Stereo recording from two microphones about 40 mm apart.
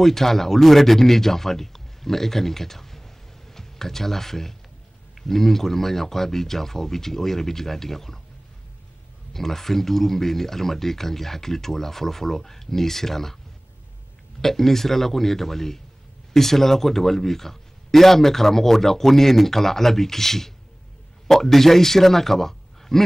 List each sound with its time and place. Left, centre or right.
0.0 s speech: centre
9.3 s speech: centre
14.4 s speech: centre